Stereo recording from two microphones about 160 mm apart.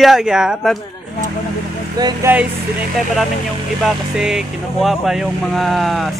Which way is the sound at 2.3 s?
10° right (ahead or behind).